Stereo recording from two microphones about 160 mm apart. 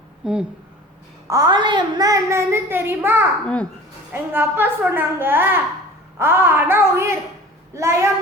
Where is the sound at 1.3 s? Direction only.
25° right (ahead or behind).